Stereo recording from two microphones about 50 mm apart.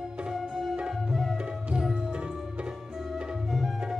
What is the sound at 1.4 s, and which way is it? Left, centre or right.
Music, centre.